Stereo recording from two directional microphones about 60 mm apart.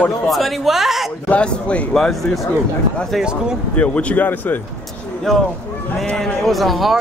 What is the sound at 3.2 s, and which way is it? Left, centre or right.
Speech, centre.